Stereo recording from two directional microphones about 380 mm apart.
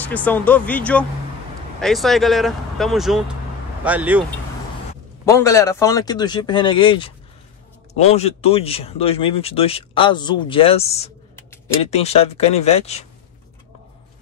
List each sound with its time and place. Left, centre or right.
0.0 s speech: centre
5.2 s speech: centre